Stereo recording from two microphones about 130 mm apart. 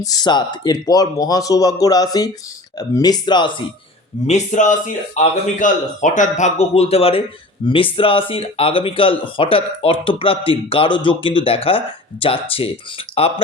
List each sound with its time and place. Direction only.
0.0 s speech: 30° left (ahead or behind)
4.3 s a man's voice: 65° left (ahead or behind); by 13.4 s 50° left (ahead or behind)